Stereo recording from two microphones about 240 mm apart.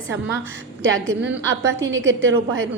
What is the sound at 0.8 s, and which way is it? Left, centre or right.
A woman's voice, right.